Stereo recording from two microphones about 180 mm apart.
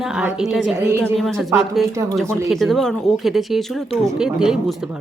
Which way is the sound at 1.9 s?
15° right (ahead or behind).